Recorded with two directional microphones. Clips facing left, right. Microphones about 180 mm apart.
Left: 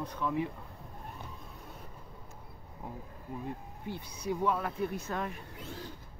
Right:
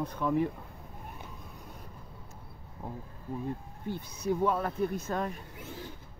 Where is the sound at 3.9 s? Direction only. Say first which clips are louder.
Right 4 dB; 45° right (ahead or behind).